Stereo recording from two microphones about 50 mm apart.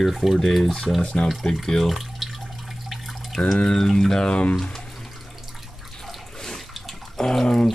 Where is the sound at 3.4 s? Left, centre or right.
Centre.